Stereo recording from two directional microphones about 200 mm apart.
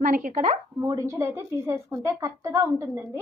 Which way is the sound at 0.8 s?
15° right (ahead or behind).